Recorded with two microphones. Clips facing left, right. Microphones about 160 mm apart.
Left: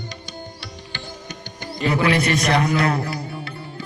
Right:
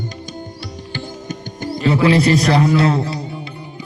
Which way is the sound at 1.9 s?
30° right (ahead or behind).